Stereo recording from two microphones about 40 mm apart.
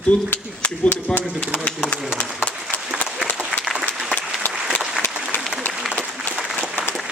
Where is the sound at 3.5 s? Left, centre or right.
Left.